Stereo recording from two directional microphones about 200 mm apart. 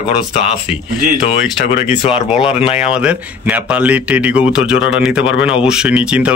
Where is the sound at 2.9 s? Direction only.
5° right (ahead or behind).